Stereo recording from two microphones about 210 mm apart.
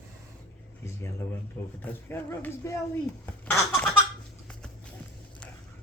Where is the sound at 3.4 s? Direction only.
10° left (ahead or behind).